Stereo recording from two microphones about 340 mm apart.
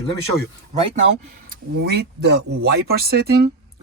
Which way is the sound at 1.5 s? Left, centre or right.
Right.